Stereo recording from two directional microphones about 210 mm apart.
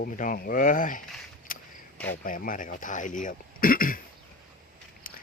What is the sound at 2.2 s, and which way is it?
Speech, 40° left (ahead or behind).